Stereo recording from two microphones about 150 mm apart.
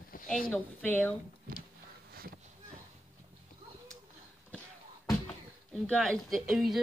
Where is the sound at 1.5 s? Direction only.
70° right (ahead or behind).